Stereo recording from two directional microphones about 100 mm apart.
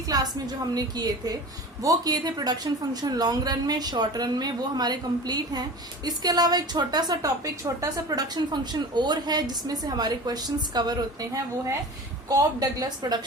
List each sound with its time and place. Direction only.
0.1 s a woman's voice: 40° right (ahead or behind)
8.7 s a woman's voice: 45° right (ahead or behind)